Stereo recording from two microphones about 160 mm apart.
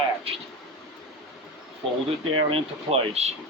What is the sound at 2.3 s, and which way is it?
Speech, 35° right (ahead or behind).